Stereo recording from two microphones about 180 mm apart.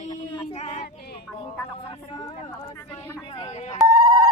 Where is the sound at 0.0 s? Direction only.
40° left (ahead or behind).